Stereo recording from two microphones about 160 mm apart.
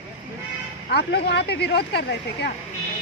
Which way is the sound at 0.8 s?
90° left.